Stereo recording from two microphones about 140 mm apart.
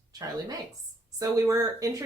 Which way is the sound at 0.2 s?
25° right (ahead or behind).